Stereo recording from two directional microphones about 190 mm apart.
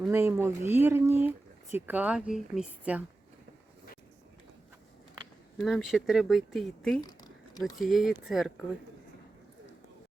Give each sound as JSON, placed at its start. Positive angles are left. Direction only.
{"t": 0.1, "sound": "speech", "side_deg": -15}
{"t": 5.5, "sound": "speech", "side_deg": 0}
{"t": 7.0, "sound": "a sound", "side_deg": 20}
{"t": 7.8, "sound": "speech", "side_deg": 0}